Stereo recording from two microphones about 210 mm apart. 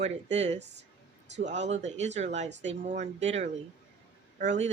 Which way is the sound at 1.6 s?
35° right (ahead or behind).